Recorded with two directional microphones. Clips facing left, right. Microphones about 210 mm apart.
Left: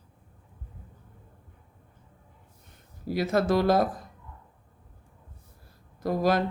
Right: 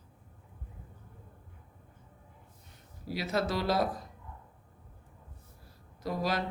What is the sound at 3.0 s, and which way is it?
Speech, 50° left (ahead or behind).